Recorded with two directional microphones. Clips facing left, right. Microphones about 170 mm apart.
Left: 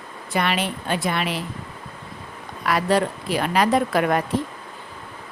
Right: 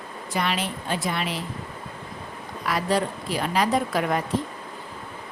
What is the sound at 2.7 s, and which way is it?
Speech, 65° left (ahead or behind).